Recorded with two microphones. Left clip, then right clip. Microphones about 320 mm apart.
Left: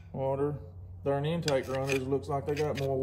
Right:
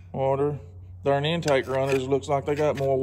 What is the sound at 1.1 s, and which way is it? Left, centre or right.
Speech, centre.